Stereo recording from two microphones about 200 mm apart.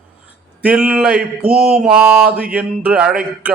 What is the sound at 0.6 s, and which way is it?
Mantra, 5° right (ahead or behind).